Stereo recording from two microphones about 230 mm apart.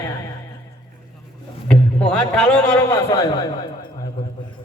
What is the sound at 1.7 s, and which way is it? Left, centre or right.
A man's voice, centre.